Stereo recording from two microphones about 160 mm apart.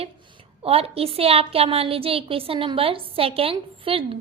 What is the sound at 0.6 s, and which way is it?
A woman's voice, 40° right (ahead or behind).